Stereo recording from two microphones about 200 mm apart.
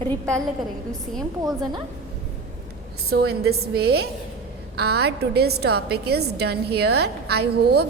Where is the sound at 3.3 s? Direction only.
55° right (ahead or behind).